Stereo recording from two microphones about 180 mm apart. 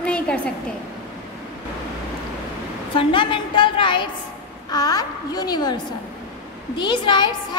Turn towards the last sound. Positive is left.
turn(degrees=25)  # may be behind; listen again after turning